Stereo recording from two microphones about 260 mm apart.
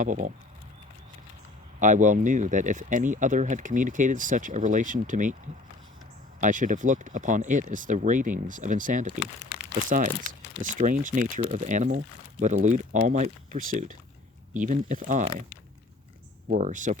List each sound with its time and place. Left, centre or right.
0.0 s speech: right
1.8 s speech: right
6.4 s speech: right
10.8 s speech: right
16.5 s speech: right